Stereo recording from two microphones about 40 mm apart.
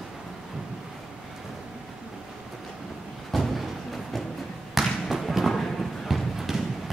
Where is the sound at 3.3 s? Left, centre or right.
Centre.